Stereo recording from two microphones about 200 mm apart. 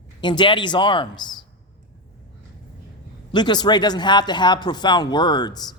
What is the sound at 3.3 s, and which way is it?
Speech, 20° left (ahead or behind).